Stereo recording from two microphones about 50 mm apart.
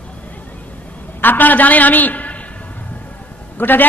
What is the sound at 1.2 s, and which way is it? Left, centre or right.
A man's voice, left.